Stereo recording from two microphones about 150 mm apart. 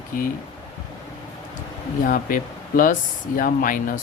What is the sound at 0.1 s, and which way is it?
Speech, 65° left (ahead or behind).